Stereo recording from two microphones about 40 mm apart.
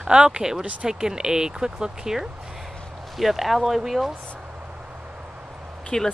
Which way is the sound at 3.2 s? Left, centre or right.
Centre.